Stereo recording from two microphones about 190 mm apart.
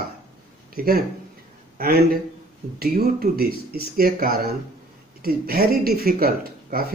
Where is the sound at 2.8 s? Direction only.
55° right (ahead or behind).